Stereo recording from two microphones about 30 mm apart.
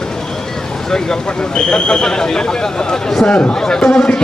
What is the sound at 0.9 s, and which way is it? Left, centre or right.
Speech, left.